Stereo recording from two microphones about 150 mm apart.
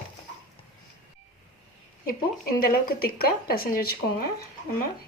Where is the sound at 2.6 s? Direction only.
85° left.